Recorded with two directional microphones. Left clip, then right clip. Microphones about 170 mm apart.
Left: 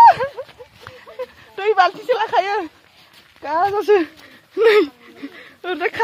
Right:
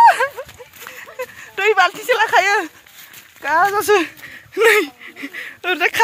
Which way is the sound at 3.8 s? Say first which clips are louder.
Right 1 dB; 15° left (ahead or behind).